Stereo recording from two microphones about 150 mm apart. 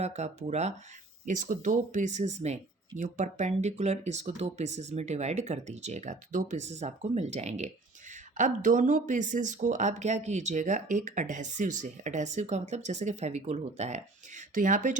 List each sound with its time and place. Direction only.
0.0 s speech: 45° right (ahead or behind)